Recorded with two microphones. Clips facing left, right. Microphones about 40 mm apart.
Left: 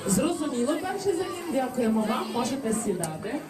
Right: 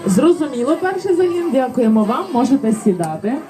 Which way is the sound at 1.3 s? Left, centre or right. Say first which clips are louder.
Right 12 dB; right.